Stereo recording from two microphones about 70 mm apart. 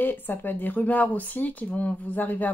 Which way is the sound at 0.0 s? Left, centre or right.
Left.